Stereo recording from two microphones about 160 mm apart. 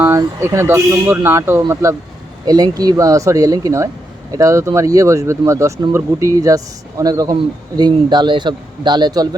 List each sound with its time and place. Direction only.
0.0 s speech: 20° right (ahead or behind)